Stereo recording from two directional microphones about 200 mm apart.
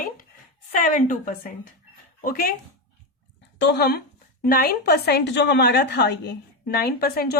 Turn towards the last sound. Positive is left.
turn(degrees=50)  # may be behind; listen again after turning